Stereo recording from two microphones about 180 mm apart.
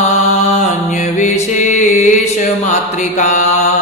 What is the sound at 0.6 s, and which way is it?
Music, 40° left (ahead or behind).